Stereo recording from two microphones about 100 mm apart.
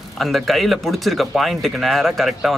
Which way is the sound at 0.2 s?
Centre (ahead or behind).